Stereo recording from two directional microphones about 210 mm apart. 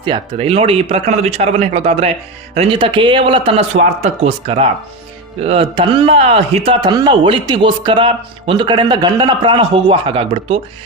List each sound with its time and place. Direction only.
0.0 s speech: 25° right (ahead or behind)